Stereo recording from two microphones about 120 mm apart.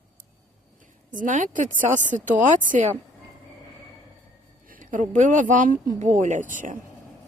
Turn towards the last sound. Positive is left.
turn(degrees=-90)